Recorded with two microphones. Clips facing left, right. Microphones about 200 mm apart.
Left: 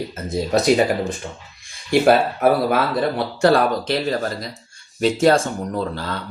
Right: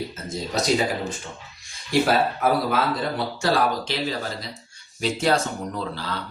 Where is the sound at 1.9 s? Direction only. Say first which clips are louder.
Left 5 dB; 60° left (ahead or behind).